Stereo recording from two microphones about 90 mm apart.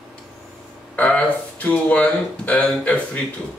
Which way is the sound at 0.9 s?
15° left (ahead or behind).